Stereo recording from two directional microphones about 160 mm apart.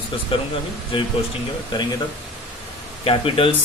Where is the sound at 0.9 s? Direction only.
35° left (ahead or behind).